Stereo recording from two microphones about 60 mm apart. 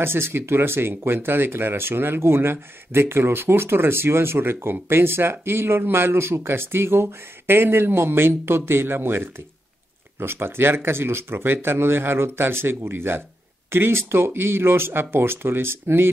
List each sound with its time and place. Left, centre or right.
0.0 s speech: right